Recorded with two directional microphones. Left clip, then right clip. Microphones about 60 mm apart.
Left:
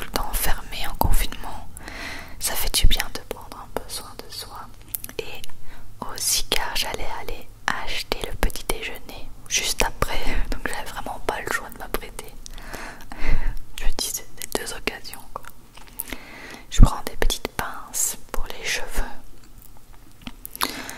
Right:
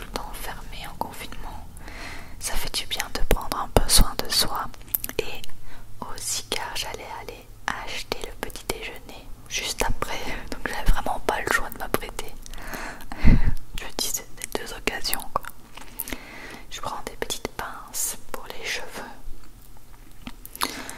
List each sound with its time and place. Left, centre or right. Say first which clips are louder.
0.0 s whispering: left 6 dB; left; by 3.1 s centre
3.3 s whispering: right 9 dB; right
5.0 s whispering: right 3 dB; centre
5.9 s whispering: left 6 dB; left; by 11.0 s centre
11.0 s whispering: right 4 dB; centre
15.0 s whispering: right 9 dB; right
15.4 s chewing: right 4 dB; centre
16.0 s a sound: even; centre
16.7 s whispering: left 6 dB; centre
20.2 s chewing: left 2 dB; centre